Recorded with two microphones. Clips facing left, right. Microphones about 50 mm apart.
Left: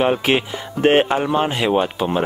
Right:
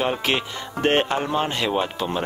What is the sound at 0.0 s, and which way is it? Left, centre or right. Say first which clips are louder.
Speech: left 6 dB; centre.